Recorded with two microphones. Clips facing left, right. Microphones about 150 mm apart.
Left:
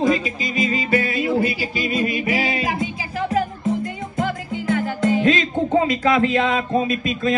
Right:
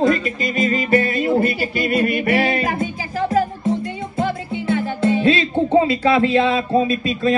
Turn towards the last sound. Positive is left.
turn(degrees=-35)  # may be behind; listen again after turning